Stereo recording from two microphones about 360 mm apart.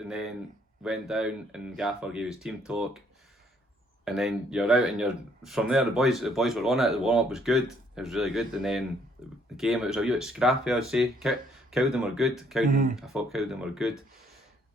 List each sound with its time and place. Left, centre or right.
0.0 s speech: centre
4.0 s speech: centre
12.6 s speech: right
13.0 s speech: centre